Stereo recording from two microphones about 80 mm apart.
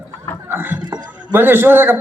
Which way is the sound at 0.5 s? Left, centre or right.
Right.